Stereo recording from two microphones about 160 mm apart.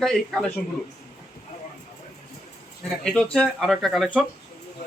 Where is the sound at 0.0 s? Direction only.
Centre (ahead or behind).